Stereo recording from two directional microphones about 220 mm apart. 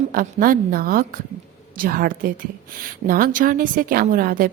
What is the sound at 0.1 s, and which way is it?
A woman's voice, 40° right (ahead or behind).